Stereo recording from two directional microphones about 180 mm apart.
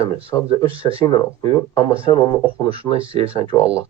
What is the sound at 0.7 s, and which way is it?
Speech, 30° right (ahead or behind).